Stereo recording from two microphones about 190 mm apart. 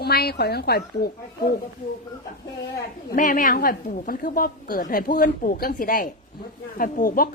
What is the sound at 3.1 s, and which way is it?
A woman's voice, 45° left (ahead or behind).